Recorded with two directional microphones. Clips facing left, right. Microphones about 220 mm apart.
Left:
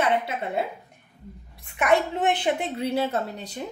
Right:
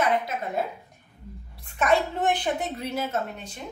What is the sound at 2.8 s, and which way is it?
Speech, 30° left (ahead or behind).